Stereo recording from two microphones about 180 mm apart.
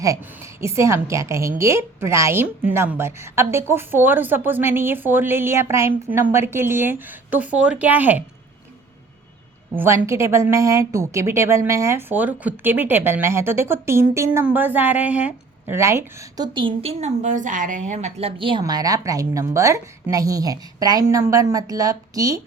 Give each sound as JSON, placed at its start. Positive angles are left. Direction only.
{"t": 0.6, "sound": "a woman's voice", "side_deg": -15}
{"t": 9.7, "sound": "a woman's voice", "side_deg": -10}
{"t": 16.6, "sound": "a woman's voice", "side_deg": -30}